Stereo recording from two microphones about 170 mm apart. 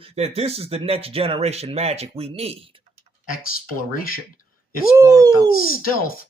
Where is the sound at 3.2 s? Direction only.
60° left (ahead or behind).